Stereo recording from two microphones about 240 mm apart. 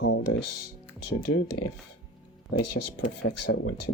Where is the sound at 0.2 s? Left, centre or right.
Left.